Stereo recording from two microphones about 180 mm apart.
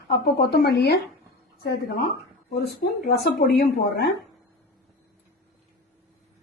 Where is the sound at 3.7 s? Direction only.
65° left (ahead or behind).